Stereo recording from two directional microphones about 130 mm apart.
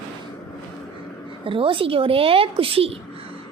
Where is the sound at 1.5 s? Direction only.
40° right (ahead or behind).